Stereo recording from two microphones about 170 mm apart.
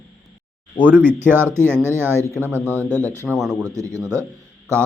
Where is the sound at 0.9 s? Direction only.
10° right (ahead or behind).